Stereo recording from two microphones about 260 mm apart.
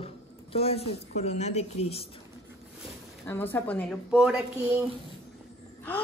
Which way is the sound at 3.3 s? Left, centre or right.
Centre.